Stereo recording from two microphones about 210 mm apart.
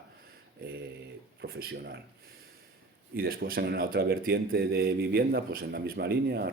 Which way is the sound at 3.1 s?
45° right (ahead or behind).